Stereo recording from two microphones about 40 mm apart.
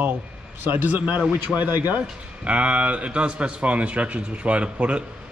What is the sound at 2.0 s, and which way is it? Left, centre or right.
Speech, right.